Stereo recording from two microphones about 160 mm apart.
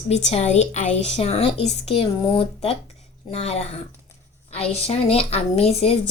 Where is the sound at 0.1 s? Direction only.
45° left (ahead or behind).